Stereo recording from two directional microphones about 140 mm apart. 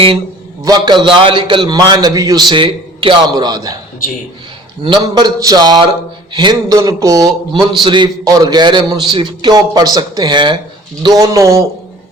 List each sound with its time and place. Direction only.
0.6 s a man's voice: 30° right (ahead or behind)
4.8 s a man's voice: 35° right (ahead or behind)